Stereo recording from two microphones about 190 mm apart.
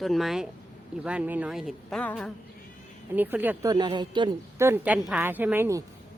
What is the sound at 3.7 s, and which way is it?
Speech, 25° right (ahead or behind).